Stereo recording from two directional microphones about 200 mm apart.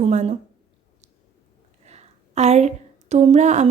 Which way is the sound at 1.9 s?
35° right (ahead or behind).